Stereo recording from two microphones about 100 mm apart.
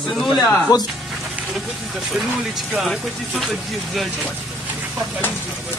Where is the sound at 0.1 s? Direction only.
Centre (ahead or behind).